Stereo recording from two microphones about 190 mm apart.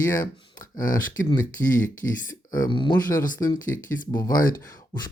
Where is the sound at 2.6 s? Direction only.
25° left (ahead or behind).